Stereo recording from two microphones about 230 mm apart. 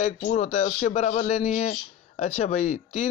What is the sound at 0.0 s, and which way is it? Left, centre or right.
Speech, left.